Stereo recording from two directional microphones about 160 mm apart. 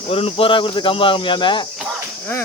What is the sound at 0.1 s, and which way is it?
Speech, 35° left (ahead or behind).